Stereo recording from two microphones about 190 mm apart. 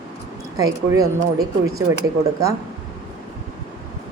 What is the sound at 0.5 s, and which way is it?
Speech, 20° right (ahead or behind).